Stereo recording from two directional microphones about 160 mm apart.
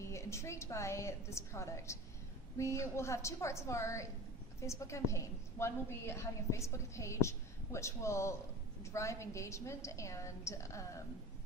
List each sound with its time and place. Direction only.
0.0 s a woman's voice: 20° left (ahead or behind)